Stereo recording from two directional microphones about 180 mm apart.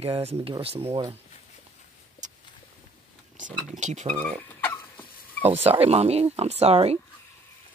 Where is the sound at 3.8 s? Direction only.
40° right (ahead or behind).